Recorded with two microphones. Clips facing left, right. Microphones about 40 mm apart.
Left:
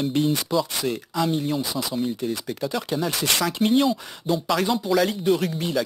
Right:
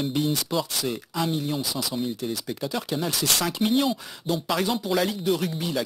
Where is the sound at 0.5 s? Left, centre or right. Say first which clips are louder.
Left 4 dB; centre.